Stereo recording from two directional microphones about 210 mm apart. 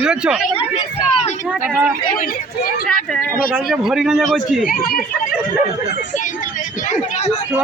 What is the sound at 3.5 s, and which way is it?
Speech, centre (ahead or behind).